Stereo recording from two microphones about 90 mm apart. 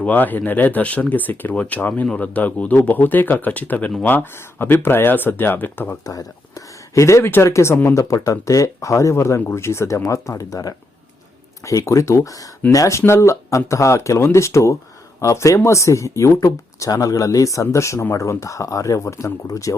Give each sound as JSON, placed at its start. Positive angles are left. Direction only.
{"t": 0.0, "sound": "speech", "side_deg": 20}
{"t": 6.1, "sound": "speech", "side_deg": 40}